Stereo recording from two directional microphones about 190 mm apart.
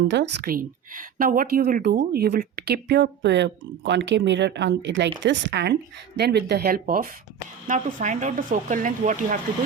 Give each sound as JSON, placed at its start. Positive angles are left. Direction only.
{"t": 0.1, "sound": "a woman's voice", "side_deg": -65}